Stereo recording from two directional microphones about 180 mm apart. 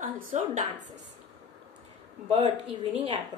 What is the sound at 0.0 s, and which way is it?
Speech, 50° right (ahead or behind).